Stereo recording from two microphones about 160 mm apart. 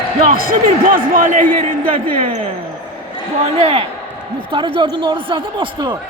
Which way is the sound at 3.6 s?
40° right (ahead or behind).